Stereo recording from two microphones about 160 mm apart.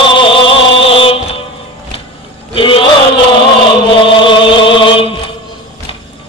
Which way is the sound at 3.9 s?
30° left (ahead or behind).